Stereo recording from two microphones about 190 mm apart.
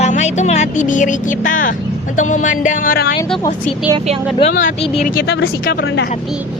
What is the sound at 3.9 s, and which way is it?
Speech, 30° right (ahead or behind).